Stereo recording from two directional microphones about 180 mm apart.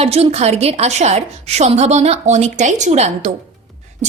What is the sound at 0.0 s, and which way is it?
A woman's voice, 35° right (ahead or behind).